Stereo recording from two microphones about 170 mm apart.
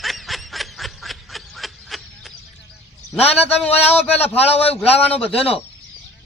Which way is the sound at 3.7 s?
35° left (ahead or behind).